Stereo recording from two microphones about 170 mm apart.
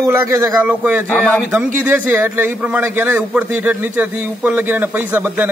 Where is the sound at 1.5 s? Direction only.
10° right (ahead or behind).